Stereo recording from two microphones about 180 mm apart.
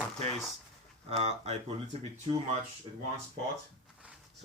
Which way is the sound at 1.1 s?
35° right (ahead or behind).